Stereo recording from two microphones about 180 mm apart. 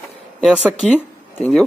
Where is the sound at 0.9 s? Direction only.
10° left (ahead or behind).